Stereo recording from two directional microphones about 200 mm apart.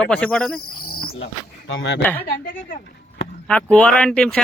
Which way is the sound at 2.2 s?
45° left (ahead or behind).